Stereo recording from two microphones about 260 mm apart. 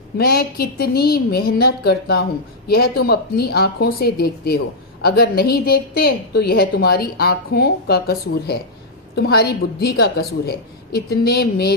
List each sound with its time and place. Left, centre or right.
0.2 s a woman's voice: left